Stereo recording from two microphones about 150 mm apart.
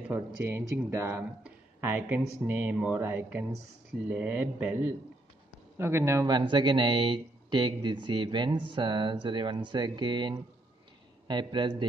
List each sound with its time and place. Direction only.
0.1 s speech: 15° right (ahead or behind); by 11.7 s 30° right (ahead or behind)